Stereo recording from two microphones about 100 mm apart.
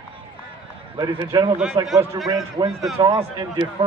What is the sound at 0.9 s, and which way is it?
Speech, 55° right (ahead or behind).